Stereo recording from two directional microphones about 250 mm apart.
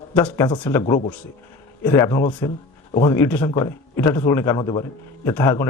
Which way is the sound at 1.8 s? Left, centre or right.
Centre.